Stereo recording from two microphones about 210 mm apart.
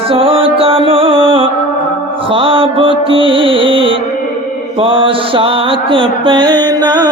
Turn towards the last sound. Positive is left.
turn(degrees=-20)  # may be behind; listen again after turning